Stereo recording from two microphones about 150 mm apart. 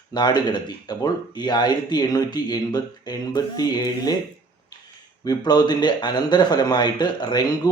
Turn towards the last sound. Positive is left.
turn(degrees=25)  # may be behind; listen again after turning